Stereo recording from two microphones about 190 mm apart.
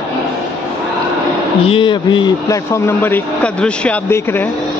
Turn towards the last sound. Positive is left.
turn(degrees=10)  # may be behind; listen again after turning